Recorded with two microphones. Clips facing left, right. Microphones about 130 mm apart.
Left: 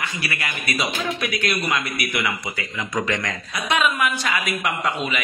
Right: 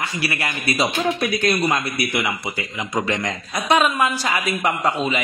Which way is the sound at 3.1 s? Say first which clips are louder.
Right 2 dB; 25° right (ahead or behind).